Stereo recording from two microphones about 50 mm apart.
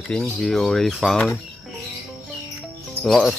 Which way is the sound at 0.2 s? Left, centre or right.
Centre.